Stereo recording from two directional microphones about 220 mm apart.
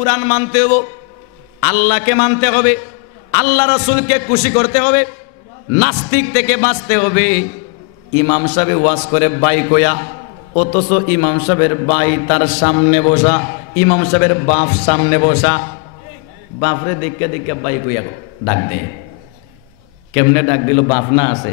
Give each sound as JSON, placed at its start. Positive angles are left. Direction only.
{"t": 0.0, "sound": "a man's voice", "side_deg": 10}
{"t": 8.5, "sound": "a man's voice", "side_deg": 15}
{"t": 10.5, "sound": "a man's voice", "side_deg": 35}
{"t": 11.1, "sound": "a man's voice", "side_deg": 15}
{"t": 16.7, "sound": "a man's voice", "side_deg": 20}
{"t": 20.2, "sound": "a man's voice", "side_deg": 15}